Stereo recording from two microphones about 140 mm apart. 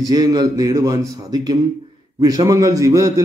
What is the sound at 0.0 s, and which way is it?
A man's voice, 25° right (ahead or behind).